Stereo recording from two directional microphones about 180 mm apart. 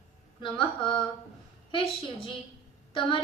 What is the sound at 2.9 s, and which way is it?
Speech, 30° left (ahead or behind).